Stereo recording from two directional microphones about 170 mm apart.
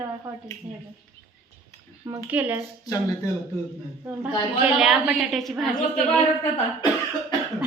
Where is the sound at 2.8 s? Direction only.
20° left (ahead or behind).